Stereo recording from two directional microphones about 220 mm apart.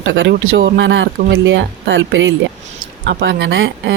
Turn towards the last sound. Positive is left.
turn(degrees=-50)  # may be behind; listen again after turning